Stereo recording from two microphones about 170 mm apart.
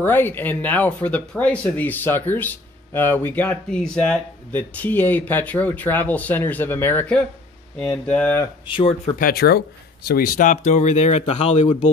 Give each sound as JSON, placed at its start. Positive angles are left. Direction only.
{"t": 0.0, "sound": "speech", "side_deg": 10}
{"t": 8.6, "sound": "speech", "side_deg": 30}
{"t": 9.2, "sound": "speech", "side_deg": 65}